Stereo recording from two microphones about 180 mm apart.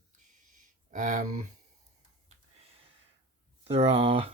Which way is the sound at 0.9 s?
45° right (ahead or behind).